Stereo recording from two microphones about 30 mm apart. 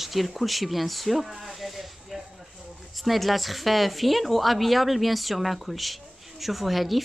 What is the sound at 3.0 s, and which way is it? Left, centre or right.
A woman's voice, centre.